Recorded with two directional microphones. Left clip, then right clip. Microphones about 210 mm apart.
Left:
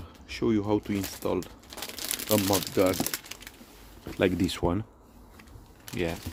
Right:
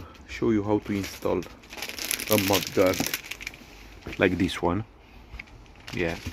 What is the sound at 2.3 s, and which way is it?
Speech, 10° left (ahead or behind).